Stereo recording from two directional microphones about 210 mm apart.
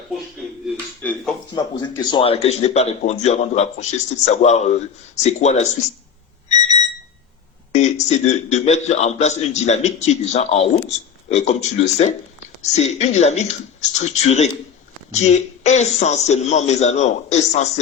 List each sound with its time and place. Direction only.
1.0 s dishes: centre (ahead or behind)
1.5 s a man's voice: 20° left (ahead or behind)
6.6 s alarm clock: 30° left (ahead or behind)
7.7 s a sound: 30° left (ahead or behind)
8.1 s a man's voice: 30° left (ahead or behind)